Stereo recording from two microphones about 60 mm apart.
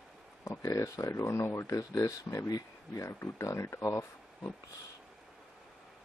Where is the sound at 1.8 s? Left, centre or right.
Left.